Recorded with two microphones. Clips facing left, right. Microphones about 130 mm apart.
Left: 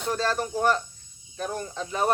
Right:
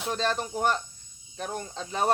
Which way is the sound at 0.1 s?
20° right (ahead or behind).